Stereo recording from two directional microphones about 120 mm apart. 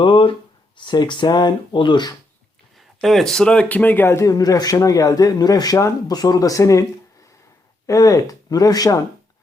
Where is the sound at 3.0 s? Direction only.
Centre (ahead or behind); by 6.8 s 25° left (ahead or behind).